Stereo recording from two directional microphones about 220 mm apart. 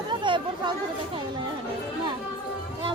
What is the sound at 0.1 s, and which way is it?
Chatter, 20° right (ahead or behind).